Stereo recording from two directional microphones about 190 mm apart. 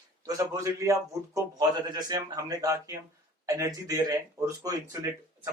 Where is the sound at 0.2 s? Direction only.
20° right (ahead or behind).